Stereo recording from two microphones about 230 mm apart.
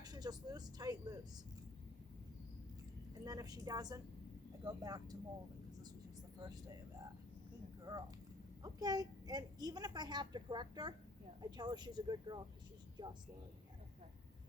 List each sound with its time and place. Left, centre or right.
0.0 s speech: centre
3.2 s a woman's voice: centre
6.4 s a woman's voice: centre